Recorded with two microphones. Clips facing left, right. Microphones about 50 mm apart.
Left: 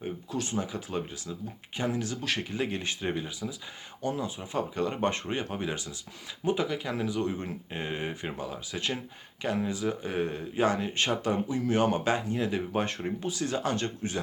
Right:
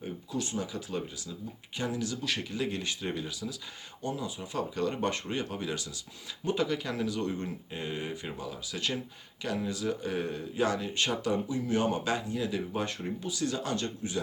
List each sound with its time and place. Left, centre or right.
0.3 s speech: left
4.0 s speech: left
4.4 s speech: left
6.4 s speech: centre
7.4 s speech: left